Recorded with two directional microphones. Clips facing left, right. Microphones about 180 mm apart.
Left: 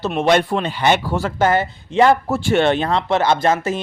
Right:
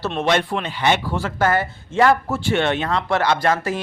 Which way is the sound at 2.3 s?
45° left (ahead or behind).